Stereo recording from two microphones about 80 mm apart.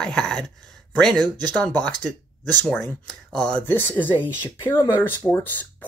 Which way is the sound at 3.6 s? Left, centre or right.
Left.